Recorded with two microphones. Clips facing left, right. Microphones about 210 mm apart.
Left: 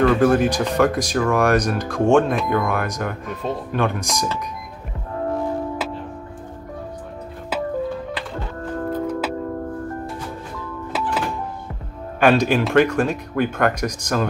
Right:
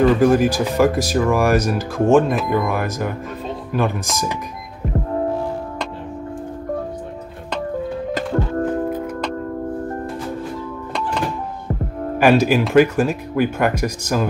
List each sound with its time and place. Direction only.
0.0 s speech: 10° right (ahead or behind)
8.1 s music: 45° right (ahead or behind)
8.8 s music: 10° right (ahead or behind)
12.2 s speech: 5° right (ahead or behind)